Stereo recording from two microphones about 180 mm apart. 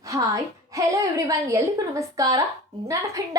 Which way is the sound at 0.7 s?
20° right (ahead or behind).